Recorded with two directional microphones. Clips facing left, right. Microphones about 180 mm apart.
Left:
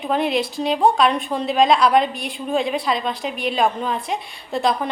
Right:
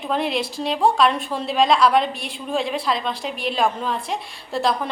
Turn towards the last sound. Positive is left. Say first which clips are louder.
# left 1 dB
turn(degrees=0)  # may be behind; listen again after turning